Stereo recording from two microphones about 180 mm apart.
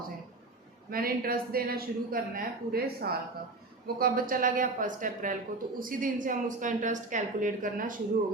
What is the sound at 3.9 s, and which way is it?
A woman's voice, 55° right (ahead or behind).